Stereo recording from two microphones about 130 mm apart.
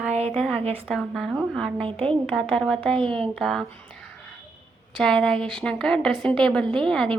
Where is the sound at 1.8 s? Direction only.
45° right (ahead or behind).